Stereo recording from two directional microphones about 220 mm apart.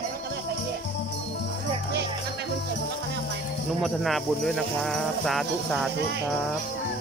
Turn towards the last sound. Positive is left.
turn(degrees=0)  # may be behind; listen again after turning